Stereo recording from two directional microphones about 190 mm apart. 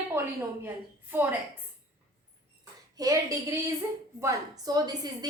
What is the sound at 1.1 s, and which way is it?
Speech, 10° right (ahead or behind).